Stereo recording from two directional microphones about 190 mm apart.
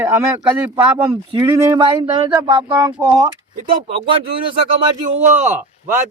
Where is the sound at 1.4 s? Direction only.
15° right (ahead or behind).